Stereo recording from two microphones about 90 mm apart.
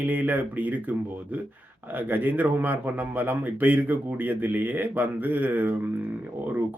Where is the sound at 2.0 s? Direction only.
20° right (ahead or behind).